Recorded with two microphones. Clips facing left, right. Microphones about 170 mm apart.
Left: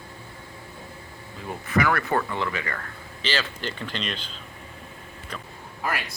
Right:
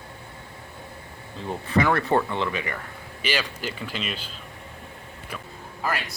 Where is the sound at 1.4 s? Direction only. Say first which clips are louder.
Right 1 dB; 25° right (ahead or behind); by 4.3 s 5° right (ahead or behind).